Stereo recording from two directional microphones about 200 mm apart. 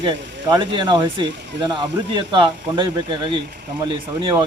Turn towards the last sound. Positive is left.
turn(degrees=-25)  # may be behind; listen again after turning